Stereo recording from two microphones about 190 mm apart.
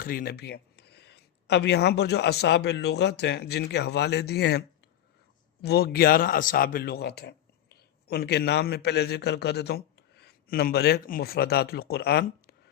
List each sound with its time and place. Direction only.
0.0 s speech: 50° left (ahead or behind)
5.6 s a man's voice: 55° left (ahead or behind)